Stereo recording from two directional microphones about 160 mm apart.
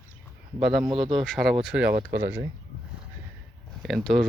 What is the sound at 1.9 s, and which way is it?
Speech, 80° right.